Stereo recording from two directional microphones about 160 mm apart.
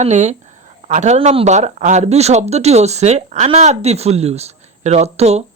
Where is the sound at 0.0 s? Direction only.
45° right (ahead or behind).